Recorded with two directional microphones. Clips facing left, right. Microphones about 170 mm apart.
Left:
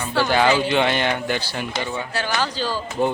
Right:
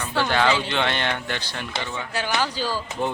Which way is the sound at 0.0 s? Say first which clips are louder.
Left 3 dB; 10° left (ahead or behind).